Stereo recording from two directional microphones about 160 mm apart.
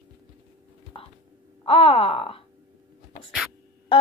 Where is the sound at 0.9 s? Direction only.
35° left (ahead or behind).